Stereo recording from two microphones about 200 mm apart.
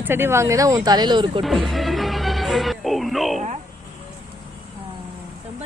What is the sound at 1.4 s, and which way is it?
Speech, centre (ahead or behind).